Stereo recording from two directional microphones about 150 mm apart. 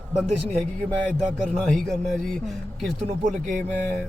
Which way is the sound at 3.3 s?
55° right (ahead or behind).